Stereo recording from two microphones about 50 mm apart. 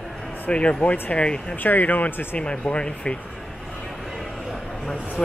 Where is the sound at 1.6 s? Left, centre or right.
Left.